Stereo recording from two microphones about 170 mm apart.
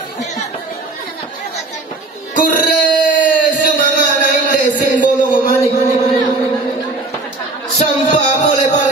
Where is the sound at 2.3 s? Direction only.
55° left (ahead or behind).